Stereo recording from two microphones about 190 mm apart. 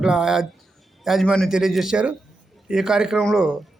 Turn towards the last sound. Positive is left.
turn(degrees=-5)  # may be behind; listen again after turning